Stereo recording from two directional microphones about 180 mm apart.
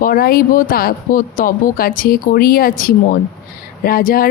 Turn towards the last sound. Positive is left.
turn(degrees=55)  # may be behind; listen again after turning